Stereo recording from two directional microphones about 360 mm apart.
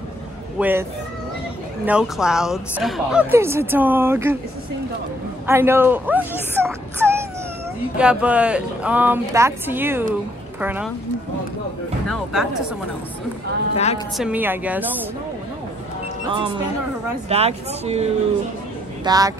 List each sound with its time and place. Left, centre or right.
0.6 s speech: centre
1.9 s speech: centre
5.5 s speech: centre
12.1 s speech: centre
13.7 s a woman's voice: centre
14.1 s speech: centre
16.3 s speech: centre